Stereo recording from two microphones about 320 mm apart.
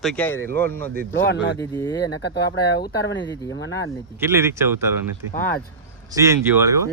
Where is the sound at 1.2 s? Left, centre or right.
Left.